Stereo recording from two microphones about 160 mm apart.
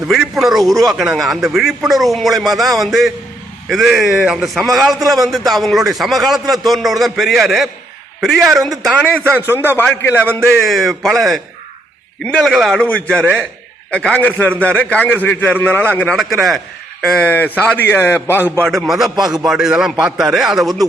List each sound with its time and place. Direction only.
0.1 s a man's voice: centre (ahead or behind)
10.7 s a man's voice: centre (ahead or behind)
18.6 s a man's voice: centre (ahead or behind)